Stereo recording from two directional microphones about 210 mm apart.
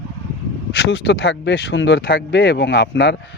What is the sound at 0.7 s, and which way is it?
Speech, 55° left (ahead or behind).